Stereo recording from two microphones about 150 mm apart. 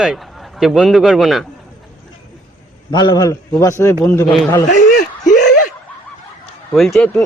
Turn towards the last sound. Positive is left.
turn(degrees=5)  # may be behind; listen again after turning